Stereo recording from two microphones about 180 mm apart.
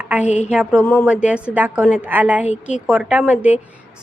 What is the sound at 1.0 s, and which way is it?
A woman's voice, 5° right (ahead or behind).